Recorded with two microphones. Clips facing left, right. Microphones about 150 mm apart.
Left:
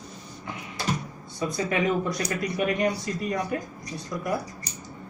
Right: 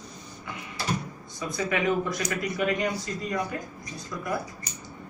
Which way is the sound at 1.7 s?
30° left (ahead or behind).